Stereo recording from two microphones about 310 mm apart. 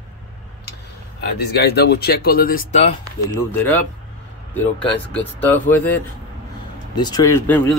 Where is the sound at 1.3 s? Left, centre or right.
Left.